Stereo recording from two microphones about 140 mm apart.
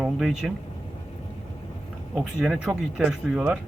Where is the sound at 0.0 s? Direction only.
Centre (ahead or behind).